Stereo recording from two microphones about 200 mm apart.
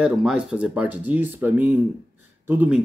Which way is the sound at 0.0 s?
5° right (ahead or behind).